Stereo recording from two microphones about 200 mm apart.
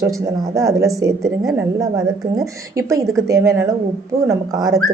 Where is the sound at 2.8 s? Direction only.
15° right (ahead or behind).